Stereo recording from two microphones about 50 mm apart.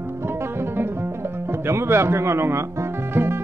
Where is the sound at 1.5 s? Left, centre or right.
Right.